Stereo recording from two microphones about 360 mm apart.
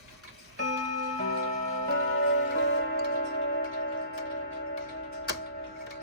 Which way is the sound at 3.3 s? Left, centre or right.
Left.